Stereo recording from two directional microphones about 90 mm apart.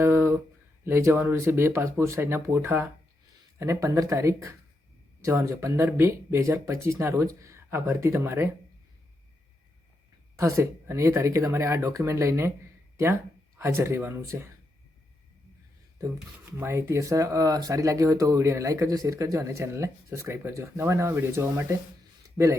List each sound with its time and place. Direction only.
0.0 s a sound: 25° right (ahead or behind)
0.9 s speech: 25° right (ahead or behind)
10.3 s speech: 35° right (ahead or behind)
13.6 s speech: 30° right (ahead or behind)
16.5 s speech: 30° right (ahead or behind)